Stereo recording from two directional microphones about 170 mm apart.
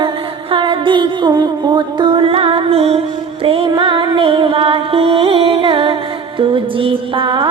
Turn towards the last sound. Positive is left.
turn(degrees=-30)  # may be behind; listen again after turning